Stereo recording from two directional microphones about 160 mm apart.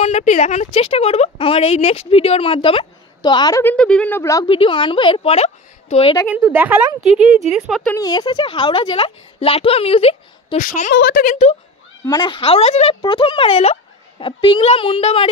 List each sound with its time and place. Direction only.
0.0 s a woman's voice: 45° left (ahead or behind); by 3.6 s 25° left (ahead or behind)
3.6 s a woman's voice: 5° left (ahead or behind)
4.5 s a woman's voice: 30° left (ahead or behind)
6.5 s a woman's voice: 10° right (ahead or behind)
8.0 s a woman's voice: 25° left (ahead or behind)
10.6 s speech: 55° left (ahead or behind)
12.0 s a woman's voice: 25° left (ahead or behind)